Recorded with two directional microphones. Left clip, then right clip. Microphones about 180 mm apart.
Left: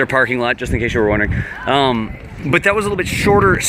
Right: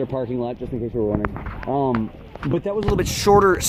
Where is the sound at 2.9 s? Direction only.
10° right (ahead or behind).